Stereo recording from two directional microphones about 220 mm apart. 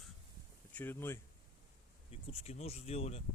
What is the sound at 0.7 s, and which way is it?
Speech, 10° left (ahead or behind).